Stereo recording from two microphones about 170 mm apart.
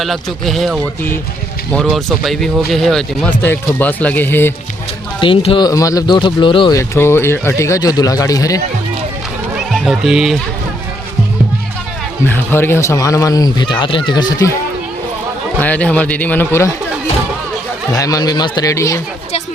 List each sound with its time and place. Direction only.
0.0 s speech: centre (ahead or behind)
5.2 s speech: 30° left (ahead or behind)
6.7 s speech: 15° left (ahead or behind)
9.6 s speech: centre (ahead or behind)
12.2 s speech: 15° left (ahead or behind)
15.6 s speech: 10° left (ahead or behind)
17.9 s speech: 20° left (ahead or behind)